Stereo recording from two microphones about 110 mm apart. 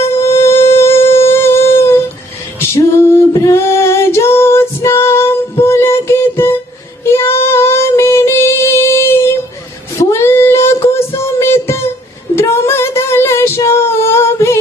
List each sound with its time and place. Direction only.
0.2 s music: 25° left (ahead or behind)
2.7 s female singing: 25° left (ahead or behind)
7.1 s child singing: 20° left (ahead or behind)